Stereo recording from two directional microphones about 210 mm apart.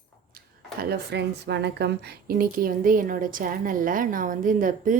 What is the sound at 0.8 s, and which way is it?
A woman's voice, 50° right (ahead or behind).